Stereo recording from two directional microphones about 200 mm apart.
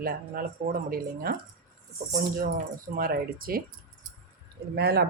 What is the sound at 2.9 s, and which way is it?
Speech, 45° right (ahead or behind).